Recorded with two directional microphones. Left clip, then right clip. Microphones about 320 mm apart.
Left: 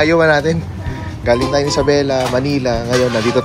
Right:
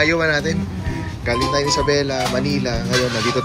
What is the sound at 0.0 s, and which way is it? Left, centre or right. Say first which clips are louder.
Speech: left 6 dB; centre.